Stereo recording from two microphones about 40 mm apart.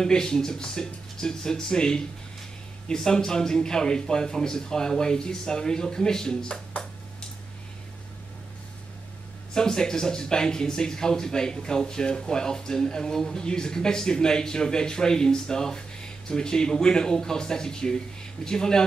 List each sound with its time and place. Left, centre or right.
0.0 s speech: centre
9.5 s speech: centre